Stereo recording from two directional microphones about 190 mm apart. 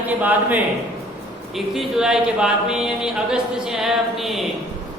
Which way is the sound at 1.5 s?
Centre (ahead or behind).